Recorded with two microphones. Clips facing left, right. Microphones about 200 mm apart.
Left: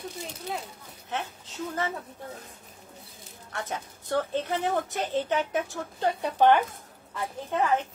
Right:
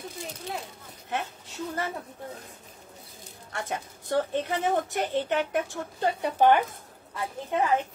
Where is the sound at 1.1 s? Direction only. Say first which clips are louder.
Right 1 dB; 10° right (ahead or behind).